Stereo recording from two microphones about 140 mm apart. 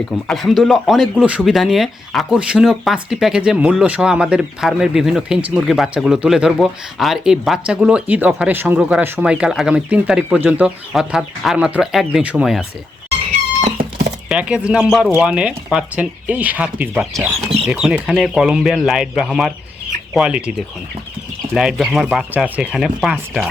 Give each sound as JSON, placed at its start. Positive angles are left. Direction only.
{"t": 0.3, "sound": "speech", "side_deg": 0}
{"t": 14.3, "sound": "speech", "side_deg": -10}